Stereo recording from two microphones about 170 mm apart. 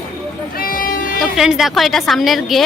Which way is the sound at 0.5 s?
60° left (ahead or behind).